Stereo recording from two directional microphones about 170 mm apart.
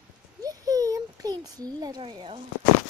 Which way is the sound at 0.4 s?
20° right (ahead or behind).